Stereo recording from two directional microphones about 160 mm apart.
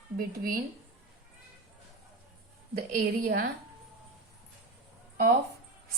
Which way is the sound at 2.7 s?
65° right (ahead or behind).